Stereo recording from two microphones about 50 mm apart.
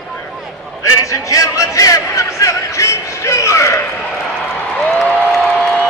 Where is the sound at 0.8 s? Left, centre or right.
Left.